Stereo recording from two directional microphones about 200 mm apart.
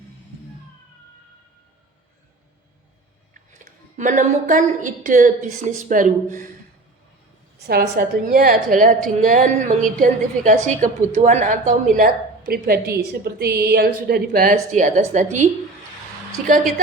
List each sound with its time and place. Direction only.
3.3 s a woman's voice: 40° right (ahead or behind)
7.7 s a woman's voice: 50° right (ahead or behind)